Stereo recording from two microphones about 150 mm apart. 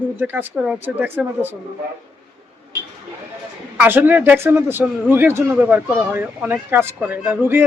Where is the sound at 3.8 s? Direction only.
15° right (ahead or behind).